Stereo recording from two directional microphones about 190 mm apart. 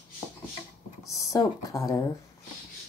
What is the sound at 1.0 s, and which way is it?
Speech, 15° left (ahead or behind).